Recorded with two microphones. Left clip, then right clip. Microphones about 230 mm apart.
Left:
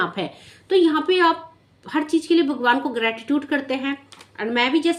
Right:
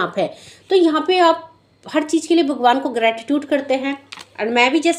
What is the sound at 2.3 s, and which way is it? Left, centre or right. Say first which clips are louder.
Speech: right 4 dB; centre.